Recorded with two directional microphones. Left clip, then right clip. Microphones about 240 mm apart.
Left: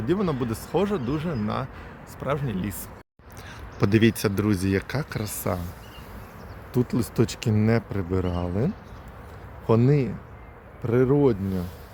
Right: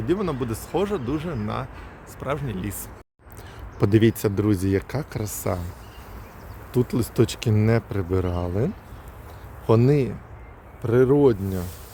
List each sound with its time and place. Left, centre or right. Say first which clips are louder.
0.1 s speech: right 1 dB; centre
3.8 s speech: right 2 dB; centre
6.7 s speech: right 3 dB; centre